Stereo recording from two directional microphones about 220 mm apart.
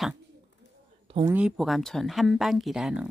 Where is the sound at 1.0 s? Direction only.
25° right (ahead or behind).